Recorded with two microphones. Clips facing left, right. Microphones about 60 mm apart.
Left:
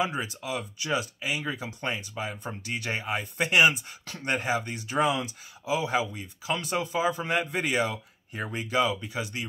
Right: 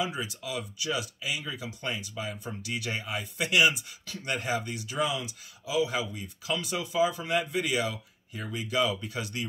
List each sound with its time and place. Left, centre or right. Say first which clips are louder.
0.0 s speech: left 3 dB; left